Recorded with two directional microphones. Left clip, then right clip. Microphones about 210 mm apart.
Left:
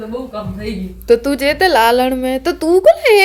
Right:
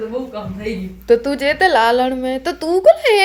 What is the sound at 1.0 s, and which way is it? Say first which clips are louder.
Speech: left 2 dB; 15° left (ahead or behind).